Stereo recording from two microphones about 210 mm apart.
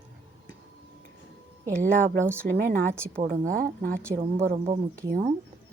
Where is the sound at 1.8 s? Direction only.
35° right (ahead or behind).